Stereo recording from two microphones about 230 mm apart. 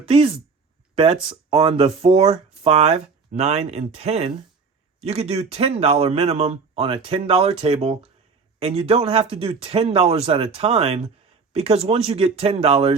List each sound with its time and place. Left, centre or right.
0.0 s speech: right